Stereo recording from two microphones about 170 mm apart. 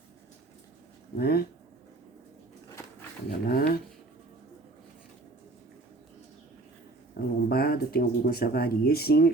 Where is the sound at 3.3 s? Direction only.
65° left (ahead or behind).